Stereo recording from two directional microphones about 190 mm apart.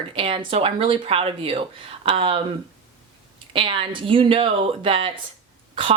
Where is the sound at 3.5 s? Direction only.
25° right (ahead or behind).